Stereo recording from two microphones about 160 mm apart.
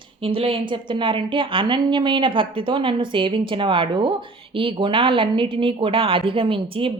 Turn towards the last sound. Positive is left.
turn(degrees=-35)  # may be behind; listen again after turning